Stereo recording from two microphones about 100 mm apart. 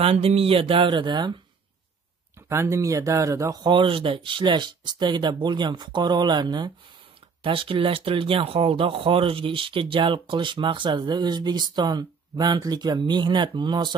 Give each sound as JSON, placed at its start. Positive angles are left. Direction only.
{"t": 0.0, "sound": "speech", "side_deg": -80}
{"t": 2.5, "sound": "speech", "side_deg": -25}
{"t": 7.4, "sound": "speech", "side_deg": -60}